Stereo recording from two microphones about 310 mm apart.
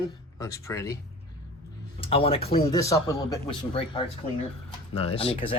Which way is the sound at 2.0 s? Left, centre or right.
Centre.